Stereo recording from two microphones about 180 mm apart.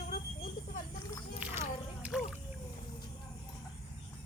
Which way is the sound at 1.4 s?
10° right (ahead or behind).